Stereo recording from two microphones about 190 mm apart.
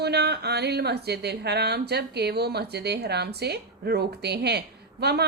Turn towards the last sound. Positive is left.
turn(degrees=-60)  # may be behind; listen again after turning